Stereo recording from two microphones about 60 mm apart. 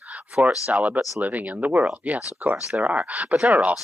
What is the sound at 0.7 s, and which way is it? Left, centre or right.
Speech, right.